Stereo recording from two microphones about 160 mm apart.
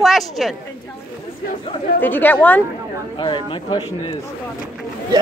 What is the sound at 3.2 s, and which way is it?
Speech, 30° left (ahead or behind).